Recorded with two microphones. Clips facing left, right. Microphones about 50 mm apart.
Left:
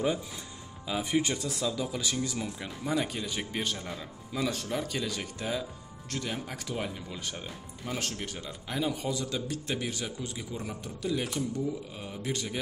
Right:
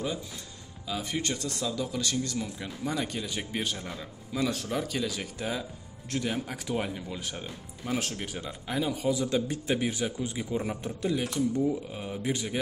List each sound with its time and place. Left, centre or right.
0.8 s speech: centre
9.7 s speech: centre
10.5 s a man's voice: right
11.1 s speech: centre
11.9 s speech: centre